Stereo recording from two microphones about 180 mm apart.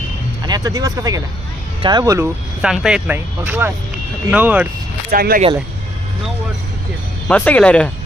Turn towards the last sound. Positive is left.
turn(degrees=5)  # may be behind; listen again after turning